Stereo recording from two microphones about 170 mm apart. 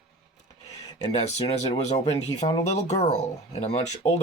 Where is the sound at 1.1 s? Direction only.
40° left (ahead or behind).